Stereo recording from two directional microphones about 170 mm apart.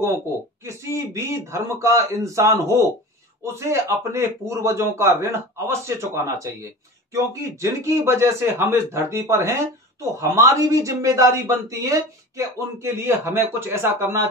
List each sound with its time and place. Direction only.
0.7 s speech: 15° right (ahead or behind)